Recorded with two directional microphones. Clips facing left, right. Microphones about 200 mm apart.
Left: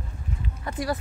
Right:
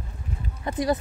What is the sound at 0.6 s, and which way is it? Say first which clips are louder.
Speech: right 5 dB; 20° right (ahead or behind).